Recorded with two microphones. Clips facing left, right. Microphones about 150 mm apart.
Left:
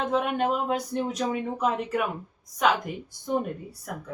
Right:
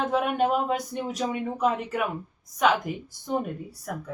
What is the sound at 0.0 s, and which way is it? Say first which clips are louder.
Speech: right 1 dB; centre (ahead or behind).